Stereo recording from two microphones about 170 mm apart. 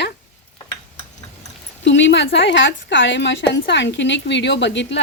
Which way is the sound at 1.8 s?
90° left.